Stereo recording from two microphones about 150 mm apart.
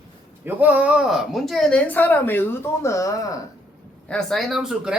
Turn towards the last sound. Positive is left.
turn(degrees=-5)  # may be behind; listen again after turning